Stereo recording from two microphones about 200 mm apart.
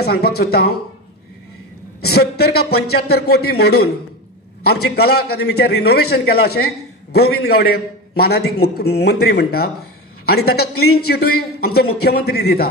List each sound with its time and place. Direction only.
0.0 s a man's voice: 50° left (ahead or behind)
2.0 s a man's voice: 50° left (ahead or behind)